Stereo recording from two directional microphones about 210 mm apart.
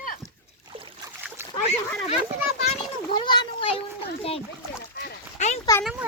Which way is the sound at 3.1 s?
20° left (ahead or behind).